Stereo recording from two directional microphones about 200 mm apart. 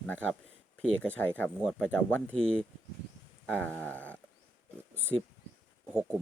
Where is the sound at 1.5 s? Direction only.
Centre (ahead or behind).